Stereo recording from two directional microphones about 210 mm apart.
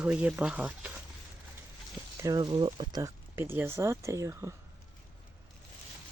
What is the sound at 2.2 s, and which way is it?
Speech, 20° right (ahead or behind).